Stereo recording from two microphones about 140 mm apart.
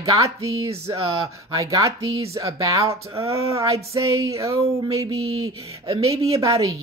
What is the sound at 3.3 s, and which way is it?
Speech, 20° right (ahead or behind).